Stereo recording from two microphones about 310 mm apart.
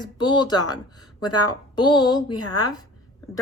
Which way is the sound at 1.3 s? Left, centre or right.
Left.